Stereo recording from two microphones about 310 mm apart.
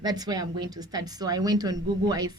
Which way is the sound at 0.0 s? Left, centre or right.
Centre.